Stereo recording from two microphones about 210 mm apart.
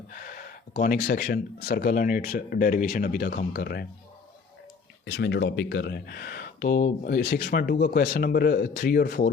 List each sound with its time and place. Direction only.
0.1 s speech: 40° left (ahead or behind)
5.0 s speech: 55° left (ahead or behind)